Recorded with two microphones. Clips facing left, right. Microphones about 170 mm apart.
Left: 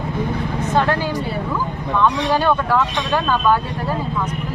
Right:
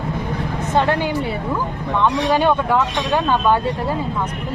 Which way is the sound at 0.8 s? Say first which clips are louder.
Right 2 dB; 20° right (ahead or behind).